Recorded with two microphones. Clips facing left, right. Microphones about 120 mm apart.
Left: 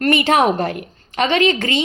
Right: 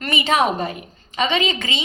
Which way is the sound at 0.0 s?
60° left (ahead or behind).